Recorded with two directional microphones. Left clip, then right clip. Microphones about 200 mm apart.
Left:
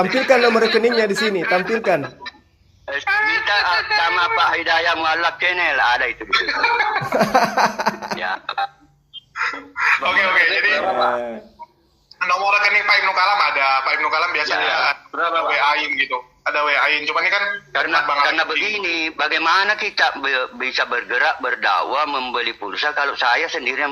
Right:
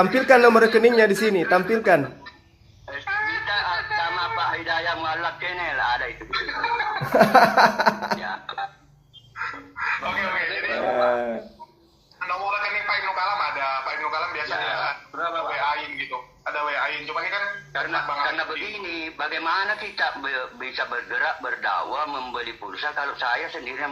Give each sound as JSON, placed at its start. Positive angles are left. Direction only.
{"t": 0.3, "sound": "a man's voice", "side_deg": 15}
{"t": 2.8, "sound": "a sound", "side_deg": 40}
{"t": 7.1, "sound": "chuckle", "side_deg": 25}
{"t": 8.2, "sound": "a man's voice", "side_deg": 40}